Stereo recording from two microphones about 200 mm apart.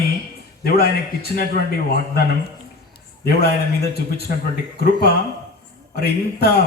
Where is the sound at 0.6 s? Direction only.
50° left (ahead or behind).